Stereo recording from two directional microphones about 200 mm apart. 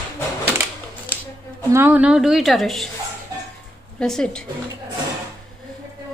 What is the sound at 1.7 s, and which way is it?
A woman's voice, 10° right (ahead or behind).